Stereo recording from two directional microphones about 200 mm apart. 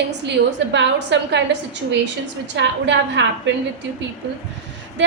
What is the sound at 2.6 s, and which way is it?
Speech, 65° right (ahead or behind).